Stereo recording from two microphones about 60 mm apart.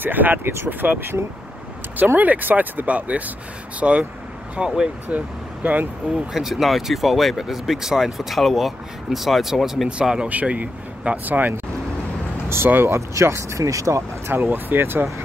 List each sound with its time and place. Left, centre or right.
0.0 s speech: right
2.1 s speech: right
5.0 s speech: right
6.1 s speech: centre
9.8 s speech: centre
12.4 s speech: right
13.1 s speech: right
14.2 s speech: right